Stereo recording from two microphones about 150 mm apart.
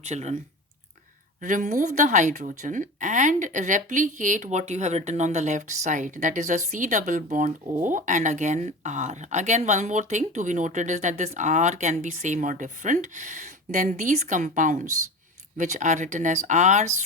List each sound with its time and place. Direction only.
0.0 s speech: 50° right (ahead or behind)
1.4 s speech: 55° right (ahead or behind)